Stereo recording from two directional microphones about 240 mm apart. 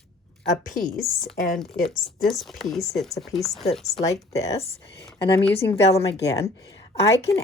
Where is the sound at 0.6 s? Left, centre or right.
Left.